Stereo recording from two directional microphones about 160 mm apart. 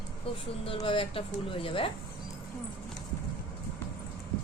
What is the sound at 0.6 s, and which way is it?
A woman's voice, 35° left (ahead or behind).